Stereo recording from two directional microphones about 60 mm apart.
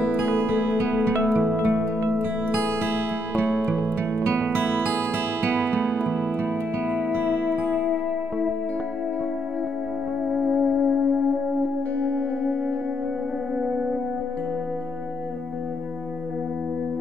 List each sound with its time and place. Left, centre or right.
1.2 s music: right
2.9 s music: right